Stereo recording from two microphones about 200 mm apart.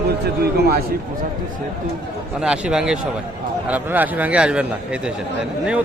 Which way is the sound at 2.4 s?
5° right (ahead or behind).